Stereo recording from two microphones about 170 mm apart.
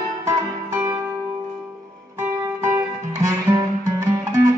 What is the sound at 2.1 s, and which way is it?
Music, 15° right (ahead or behind).